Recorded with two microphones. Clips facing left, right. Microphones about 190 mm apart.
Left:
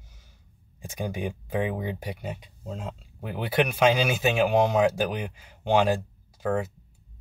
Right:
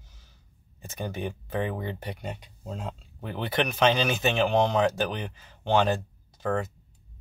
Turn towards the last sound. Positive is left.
turn(degrees=10)  # may be behind; listen again after turning